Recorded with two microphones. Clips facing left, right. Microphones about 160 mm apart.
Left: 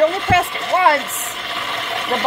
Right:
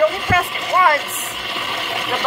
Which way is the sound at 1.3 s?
5° right (ahead or behind).